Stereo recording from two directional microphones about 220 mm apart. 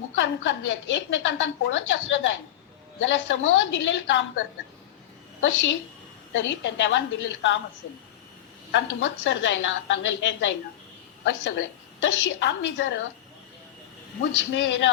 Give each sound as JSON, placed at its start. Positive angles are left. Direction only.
{"t": 0.2, "sound": "a woman's voice", "side_deg": 55}
{"t": 8.7, "sound": "a woman's voice", "side_deg": 55}
{"t": 14.5, "sound": "a woman's voice", "side_deg": 55}